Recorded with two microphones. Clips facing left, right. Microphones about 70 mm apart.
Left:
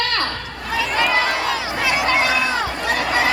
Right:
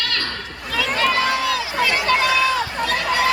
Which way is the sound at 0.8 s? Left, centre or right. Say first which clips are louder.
Even; left.